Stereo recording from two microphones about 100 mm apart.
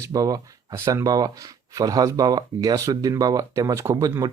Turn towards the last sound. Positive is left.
turn(degrees=-35)  # may be behind; listen again after turning